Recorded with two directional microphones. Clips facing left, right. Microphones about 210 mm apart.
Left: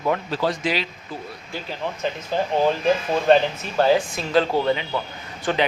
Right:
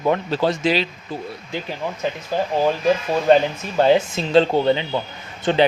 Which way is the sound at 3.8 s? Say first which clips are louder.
Right 3 dB; 25° right (ahead or behind).